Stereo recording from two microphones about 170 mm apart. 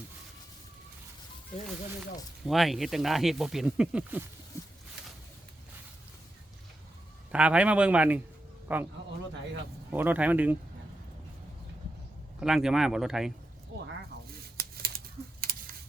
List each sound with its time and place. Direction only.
2.4 s speech: centre (ahead or behind)
7.3 s a man's voice: 5° right (ahead or behind)
9.9 s a man's voice: 10° right (ahead or behind)
12.4 s speech: 5° right (ahead or behind)
13.7 s zipper: 90° right
14.6 s a sound: 60° right (ahead or behind)